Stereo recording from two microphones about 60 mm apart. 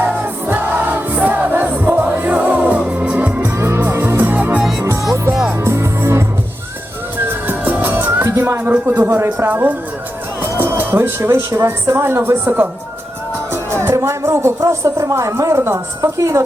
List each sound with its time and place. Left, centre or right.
0.0 s music: right
3.6 s music: right
4.2 s music: right
5.5 s music: right
7.4 s music: right
8.2 s speech: right
8.6 s a man's voice: right
13.5 s music: right
14.6 s a woman's voice: right
16.0 s a woman's voice: right